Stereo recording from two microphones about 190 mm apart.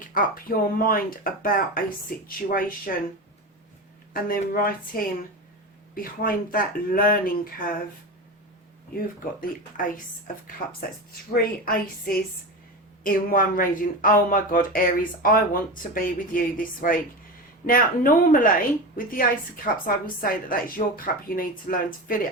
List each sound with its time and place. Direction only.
0.1 s speech: 50° left (ahead or behind)
4.1 s speech: 50° left (ahead or behind)
9.0 s speech: 45° left (ahead or behind)
19.6 s speech: 45° left (ahead or behind)